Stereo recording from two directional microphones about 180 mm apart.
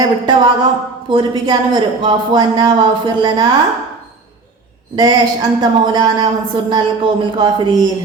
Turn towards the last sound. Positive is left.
turn(degrees=-25)  # may be behind; listen again after turning